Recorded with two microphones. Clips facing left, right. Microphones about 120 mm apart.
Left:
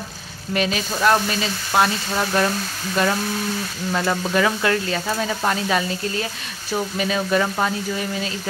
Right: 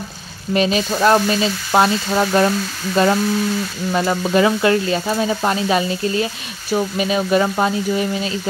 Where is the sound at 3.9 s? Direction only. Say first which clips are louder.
Right 3 dB; 15° right (ahead or behind).